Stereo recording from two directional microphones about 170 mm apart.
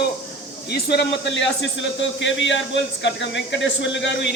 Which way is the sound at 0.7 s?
75° left (ahead or behind).